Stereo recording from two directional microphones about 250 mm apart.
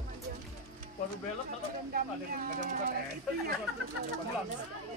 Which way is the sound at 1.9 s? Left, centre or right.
Right.